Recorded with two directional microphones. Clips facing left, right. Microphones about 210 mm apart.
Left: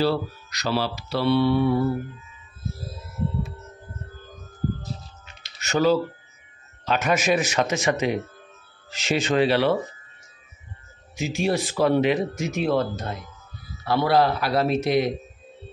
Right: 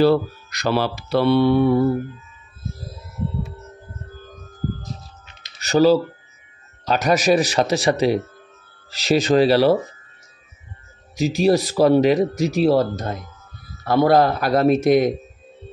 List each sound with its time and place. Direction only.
0.0 s speech: 55° right (ahead or behind)
5.6 s speech: 35° right (ahead or behind)
11.1 s speech: 40° right (ahead or behind)